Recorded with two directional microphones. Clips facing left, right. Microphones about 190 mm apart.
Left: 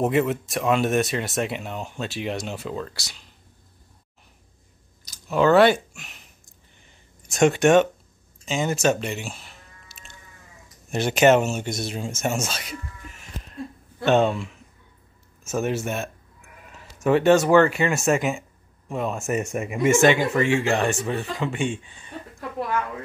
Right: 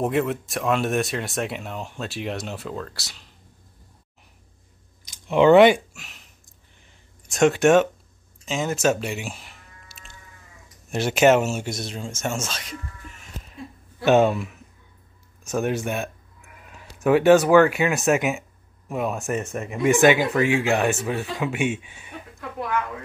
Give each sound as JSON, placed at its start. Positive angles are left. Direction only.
{"t": 0.0, "sound": "speech", "side_deg": 0}
{"t": 5.3, "sound": "speech", "side_deg": -20}
{"t": 5.9, "sound": "a sound", "side_deg": 0}
{"t": 7.2, "sound": "speech", "side_deg": 0}
{"t": 10.9, "sound": "speech", "side_deg": 0}
{"t": 12.2, "sound": "a sound", "side_deg": 10}
{"t": 14.0, "sound": "speech", "side_deg": -5}